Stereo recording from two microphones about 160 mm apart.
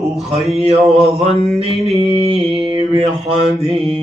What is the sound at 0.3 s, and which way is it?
Mantra, 40° right (ahead or behind).